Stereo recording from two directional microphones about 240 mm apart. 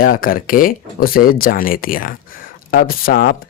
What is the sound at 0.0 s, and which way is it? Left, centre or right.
Speech, left.